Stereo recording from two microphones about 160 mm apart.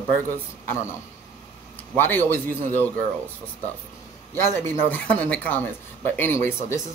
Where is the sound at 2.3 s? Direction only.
60° right (ahead or behind).